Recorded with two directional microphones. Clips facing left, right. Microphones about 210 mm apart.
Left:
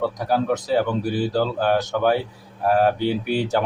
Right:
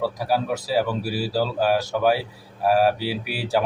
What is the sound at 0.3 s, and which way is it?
Speech, 5° right (ahead or behind).